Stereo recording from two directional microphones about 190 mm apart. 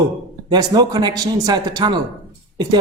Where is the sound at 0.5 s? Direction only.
20° right (ahead or behind).